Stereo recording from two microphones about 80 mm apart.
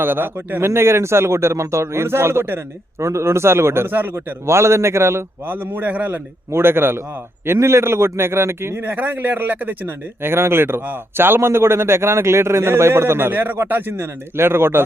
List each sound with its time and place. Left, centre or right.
0.0 s a man's voice: right
4.4 s a man's voice: right